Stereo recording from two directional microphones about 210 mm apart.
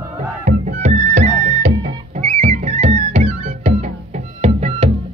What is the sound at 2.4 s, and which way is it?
Music, 30° right (ahead or behind).